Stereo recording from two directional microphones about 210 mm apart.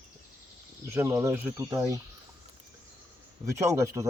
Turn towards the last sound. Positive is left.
turn(degrees=-15)  # may be behind; listen again after turning